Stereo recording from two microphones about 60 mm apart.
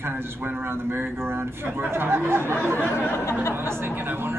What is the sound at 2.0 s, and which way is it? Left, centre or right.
Speech, right.